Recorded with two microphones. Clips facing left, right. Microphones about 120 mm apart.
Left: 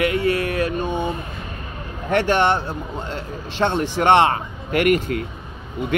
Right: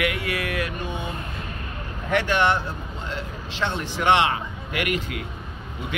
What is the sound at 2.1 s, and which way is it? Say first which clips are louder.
Speech: left 4 dB; 35° left (ahead or behind).